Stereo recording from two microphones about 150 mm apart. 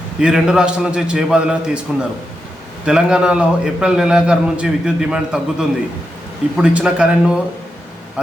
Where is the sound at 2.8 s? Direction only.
5° right (ahead or behind).